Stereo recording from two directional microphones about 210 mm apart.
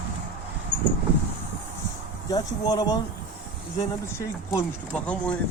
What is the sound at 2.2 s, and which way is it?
Speech, 20° left (ahead or behind).